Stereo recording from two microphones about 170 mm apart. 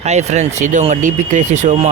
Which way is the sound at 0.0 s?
40° right (ahead or behind).